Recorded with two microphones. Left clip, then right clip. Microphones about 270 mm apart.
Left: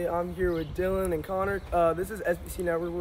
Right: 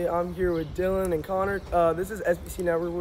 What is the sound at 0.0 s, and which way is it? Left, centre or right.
Speech, centre.